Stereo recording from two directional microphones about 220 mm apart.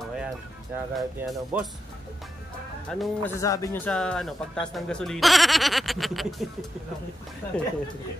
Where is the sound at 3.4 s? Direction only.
15° left (ahead or behind).